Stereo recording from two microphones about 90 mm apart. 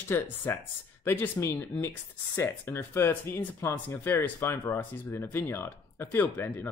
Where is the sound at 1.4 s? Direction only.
30° left (ahead or behind).